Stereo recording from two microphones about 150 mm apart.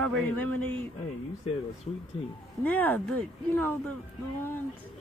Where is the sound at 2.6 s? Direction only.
10° left (ahead or behind).